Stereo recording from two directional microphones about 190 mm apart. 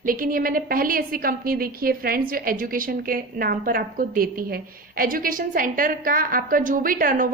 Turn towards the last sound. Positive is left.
turn(degrees=-45)  # may be behind; listen again after turning